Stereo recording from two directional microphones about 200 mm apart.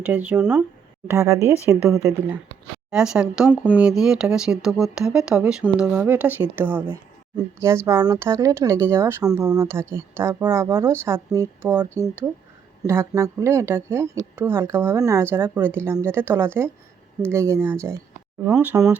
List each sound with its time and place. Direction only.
0.0 s speech: 10° right (ahead or behind)
2.9 s speech: 5° right (ahead or behind)